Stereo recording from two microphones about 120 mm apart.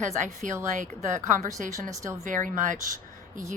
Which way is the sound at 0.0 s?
90° right.